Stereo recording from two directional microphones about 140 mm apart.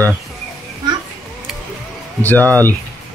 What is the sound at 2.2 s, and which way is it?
Speech, 10° left (ahead or behind).